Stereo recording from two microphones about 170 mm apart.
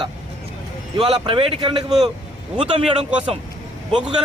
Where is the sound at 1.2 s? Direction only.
30° right (ahead or behind).